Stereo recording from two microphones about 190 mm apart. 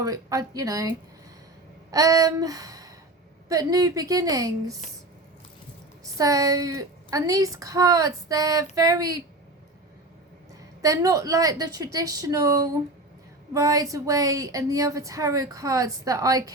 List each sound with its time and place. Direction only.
0.0 s a woman's voice: 20° right (ahead or behind)
1.9 s a sound: 20° right (ahead or behind)
3.5 s a woman's voice: 20° right (ahead or behind)
6.1 s a woman's voice: 20° right (ahead or behind)
10.8 s a woman's voice: 15° right (ahead or behind)